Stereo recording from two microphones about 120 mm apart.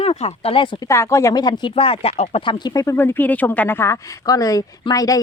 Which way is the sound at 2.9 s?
15° left (ahead or behind).